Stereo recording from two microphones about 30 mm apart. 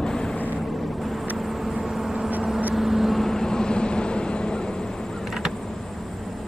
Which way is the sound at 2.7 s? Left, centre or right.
Centre.